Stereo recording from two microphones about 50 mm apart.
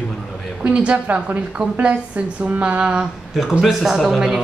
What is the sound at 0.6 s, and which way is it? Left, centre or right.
A woman's voice, right.